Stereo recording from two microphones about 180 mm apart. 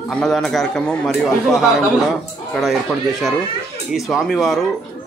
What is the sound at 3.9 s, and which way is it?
Speech, centre (ahead or behind).